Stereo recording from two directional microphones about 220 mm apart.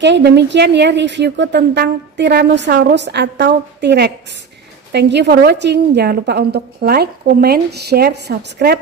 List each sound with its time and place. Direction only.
0.0 s speech: 50° right (ahead or behind)